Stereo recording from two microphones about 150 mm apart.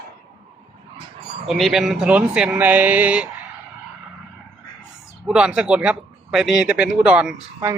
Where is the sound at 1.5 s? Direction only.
Centre (ahead or behind).